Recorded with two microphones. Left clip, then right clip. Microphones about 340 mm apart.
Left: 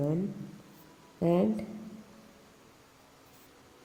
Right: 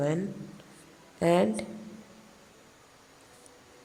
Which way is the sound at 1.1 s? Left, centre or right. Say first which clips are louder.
Right 4 dB; right.